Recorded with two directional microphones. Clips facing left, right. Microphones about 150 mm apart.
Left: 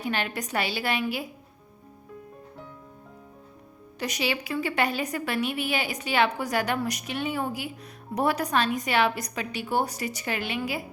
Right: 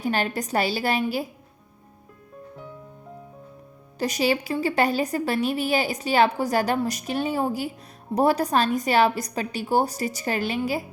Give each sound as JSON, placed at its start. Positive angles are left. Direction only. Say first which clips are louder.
{"t": 0.0, "sound": "a woman's voice", "louder": "right 4 dB", "side_deg": -40}
{"t": 3.9, "sound": "a woman's voice", "louder": "right 6 dB", "side_deg": -35}